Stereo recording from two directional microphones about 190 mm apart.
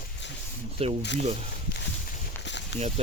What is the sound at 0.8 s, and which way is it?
Speech, 30° right (ahead or behind).